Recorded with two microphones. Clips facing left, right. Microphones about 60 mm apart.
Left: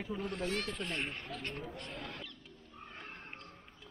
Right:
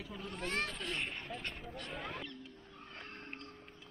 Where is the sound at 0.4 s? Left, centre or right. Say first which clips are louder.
Right 2 dB; right.